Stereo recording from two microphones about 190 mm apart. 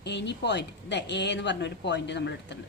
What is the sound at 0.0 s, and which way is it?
A woman's voice, 65° left (ahead or behind).